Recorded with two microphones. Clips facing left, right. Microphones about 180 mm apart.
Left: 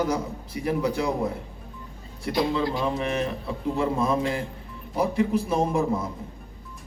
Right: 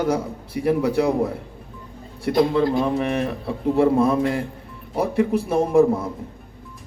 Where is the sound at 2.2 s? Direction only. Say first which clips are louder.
Right 6 dB; 55° right (ahead or behind).